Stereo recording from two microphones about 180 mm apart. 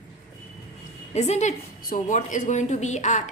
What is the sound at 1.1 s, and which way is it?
A woman's voice, 40° left (ahead or behind).